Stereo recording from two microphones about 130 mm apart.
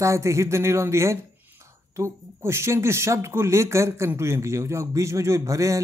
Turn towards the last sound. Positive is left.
turn(degrees=-25)  # may be behind; listen again after turning